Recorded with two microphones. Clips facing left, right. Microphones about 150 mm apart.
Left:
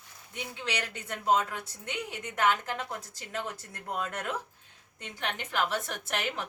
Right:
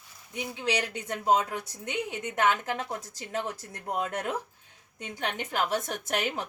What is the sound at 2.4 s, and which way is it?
Speech, 20° right (ahead or behind).